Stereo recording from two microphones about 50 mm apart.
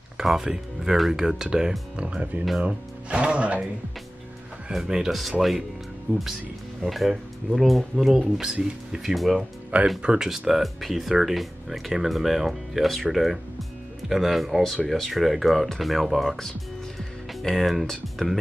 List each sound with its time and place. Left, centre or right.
0.2 s speech: centre; by 3.6 s right
4.7 s speech: centre
5.4 s speech: centre
6.1 s speech: right
6.8 s speech: centre
9.7 s speech: right
10.0 s speech: centre